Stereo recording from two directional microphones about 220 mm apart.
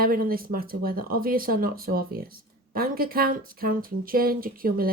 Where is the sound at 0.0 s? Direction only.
40° right (ahead or behind).